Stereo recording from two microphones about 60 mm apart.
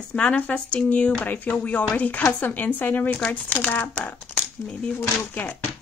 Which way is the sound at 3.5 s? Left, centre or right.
Left.